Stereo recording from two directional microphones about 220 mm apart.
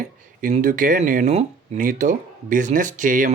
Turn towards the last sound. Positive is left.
turn(degrees=-35)  # may be behind; listen again after turning